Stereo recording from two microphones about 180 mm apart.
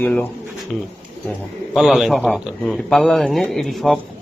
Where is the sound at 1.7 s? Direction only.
Centre (ahead or behind).